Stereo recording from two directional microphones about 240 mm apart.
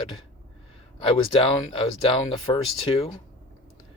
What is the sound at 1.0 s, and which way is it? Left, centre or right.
Speech, left.